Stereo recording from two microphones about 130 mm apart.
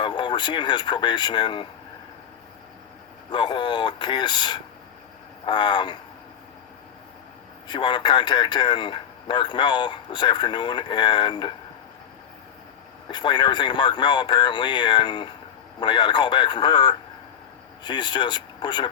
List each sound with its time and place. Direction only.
0.0 s speech: 35° left (ahead or behind)
3.3 s a man's voice: 35° left (ahead or behind)
7.7 s a man's voice: 35° left (ahead or behind)
13.1 s a man's voice: 35° left (ahead or behind)